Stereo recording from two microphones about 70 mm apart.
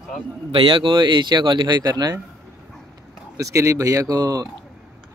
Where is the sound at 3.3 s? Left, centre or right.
Right.